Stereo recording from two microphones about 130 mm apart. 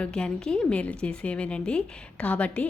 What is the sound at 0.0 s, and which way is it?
A woman's voice, 5° left (ahead or behind).